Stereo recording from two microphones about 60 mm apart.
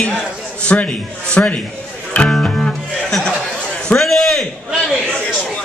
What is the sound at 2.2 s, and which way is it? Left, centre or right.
Music, centre.